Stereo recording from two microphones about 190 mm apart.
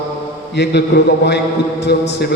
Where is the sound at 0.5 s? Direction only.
60° left (ahead or behind).